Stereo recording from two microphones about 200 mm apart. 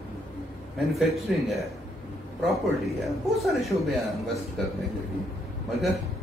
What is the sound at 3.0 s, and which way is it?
A man's voice, centre (ahead or behind).